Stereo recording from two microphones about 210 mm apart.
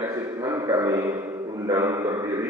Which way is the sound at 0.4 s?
15° right (ahead or behind).